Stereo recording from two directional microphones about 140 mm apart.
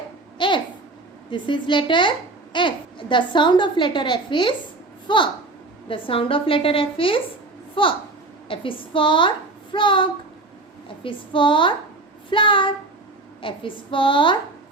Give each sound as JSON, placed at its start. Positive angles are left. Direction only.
{"t": 0.3, "sound": "babbling", "side_deg": 35}
{"t": 1.3, "sound": "a child's voice", "side_deg": 35}